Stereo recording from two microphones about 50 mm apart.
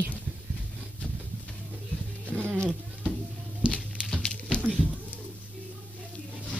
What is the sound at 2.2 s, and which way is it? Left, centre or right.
Music, right.